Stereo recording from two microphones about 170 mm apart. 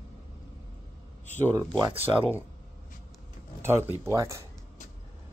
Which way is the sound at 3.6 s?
15° right (ahead or behind).